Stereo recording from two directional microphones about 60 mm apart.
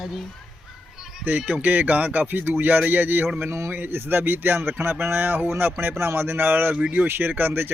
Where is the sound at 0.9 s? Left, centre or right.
Centre.